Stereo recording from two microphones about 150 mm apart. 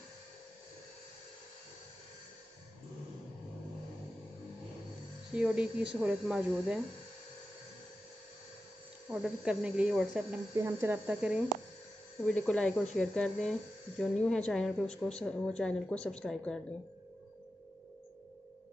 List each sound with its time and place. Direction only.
5.3 s speech: 5° right (ahead or behind)
9.1 s speech: 5° right (ahead or behind)
10.5 s speech: 20° right (ahead or behind)
12.3 s speech: 5° left (ahead or behind)